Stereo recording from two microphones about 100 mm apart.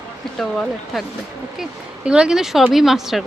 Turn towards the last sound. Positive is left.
turn(degrees=-5)  # may be behind; listen again after turning